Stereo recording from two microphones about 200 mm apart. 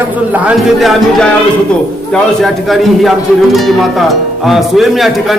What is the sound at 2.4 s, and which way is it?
Speech, centre (ahead or behind).